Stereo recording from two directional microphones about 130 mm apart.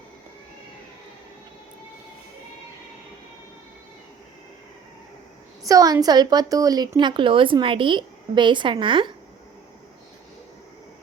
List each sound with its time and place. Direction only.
5.6 s a woman's voice: 25° right (ahead or behind)